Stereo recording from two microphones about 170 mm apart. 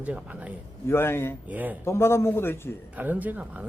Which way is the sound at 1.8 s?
15° left (ahead or behind).